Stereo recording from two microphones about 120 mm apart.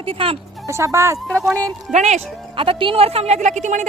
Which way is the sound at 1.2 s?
5° left (ahead or behind).